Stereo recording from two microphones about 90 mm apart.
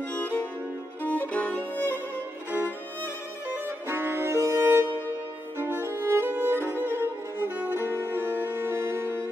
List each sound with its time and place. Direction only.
0.1 s music: 15° left (ahead or behind)
3.4 s music: 25° right (ahead or behind)